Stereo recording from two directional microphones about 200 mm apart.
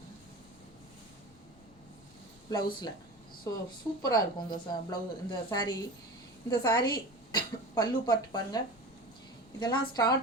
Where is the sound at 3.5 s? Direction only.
15° left (ahead or behind).